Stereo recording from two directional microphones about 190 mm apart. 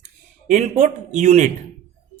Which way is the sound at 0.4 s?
40° right (ahead or behind).